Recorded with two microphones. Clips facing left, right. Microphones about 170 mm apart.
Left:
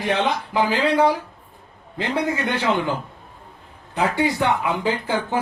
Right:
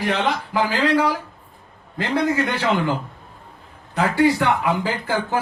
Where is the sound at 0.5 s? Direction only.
15° left (ahead or behind).